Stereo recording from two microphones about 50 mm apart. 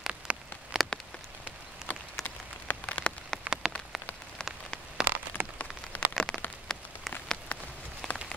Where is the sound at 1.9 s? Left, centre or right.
Left.